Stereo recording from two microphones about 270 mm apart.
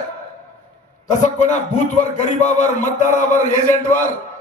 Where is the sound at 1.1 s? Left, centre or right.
Left.